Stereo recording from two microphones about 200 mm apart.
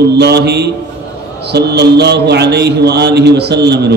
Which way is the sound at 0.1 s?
55° right (ahead or behind).